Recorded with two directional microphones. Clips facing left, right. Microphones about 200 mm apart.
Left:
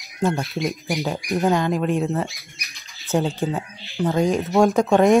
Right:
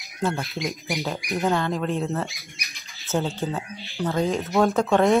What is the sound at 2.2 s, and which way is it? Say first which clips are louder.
Bird: left 1 dB; centre (ahead or behind).